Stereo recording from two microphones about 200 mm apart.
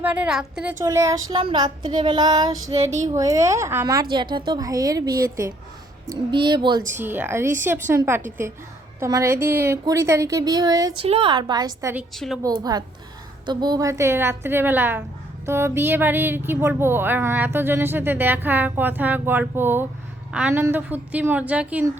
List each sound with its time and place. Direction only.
0.0 s speech: 5° right (ahead or behind)
10.9 s speech: 30° right (ahead or behind)
12.1 s a woman's voice: centre (ahead or behind)
12.4 s speech: 20° right (ahead or behind)